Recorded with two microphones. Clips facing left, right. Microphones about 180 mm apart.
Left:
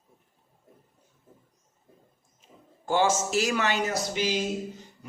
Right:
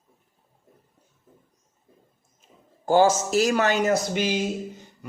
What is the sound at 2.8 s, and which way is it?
A man's voice, 40° right (ahead or behind).